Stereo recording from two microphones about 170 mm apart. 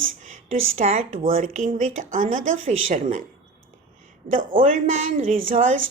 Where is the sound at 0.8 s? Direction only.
40° right (ahead or behind).